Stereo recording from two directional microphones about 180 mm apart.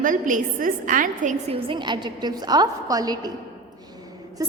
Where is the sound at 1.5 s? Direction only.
25° right (ahead or behind).